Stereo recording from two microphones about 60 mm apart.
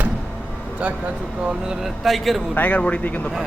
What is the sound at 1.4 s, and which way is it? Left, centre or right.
Speech, centre.